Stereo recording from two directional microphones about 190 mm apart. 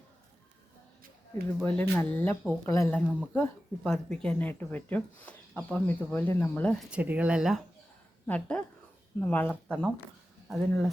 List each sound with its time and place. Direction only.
1.6 s speech: 10° left (ahead or behind)
6.9 s speech: 10° right (ahead or behind)